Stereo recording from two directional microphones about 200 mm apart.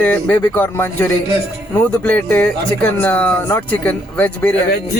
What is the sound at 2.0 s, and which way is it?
Speech, 10° left (ahead or behind).